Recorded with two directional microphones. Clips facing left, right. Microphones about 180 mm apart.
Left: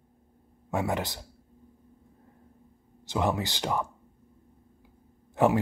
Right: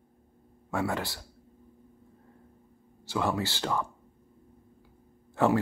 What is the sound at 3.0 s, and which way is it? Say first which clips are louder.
Speech: left 1 dB; 20° left (ahead or behind).